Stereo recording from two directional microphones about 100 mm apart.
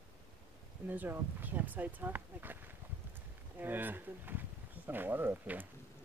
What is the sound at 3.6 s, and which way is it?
Speech, 20° right (ahead or behind).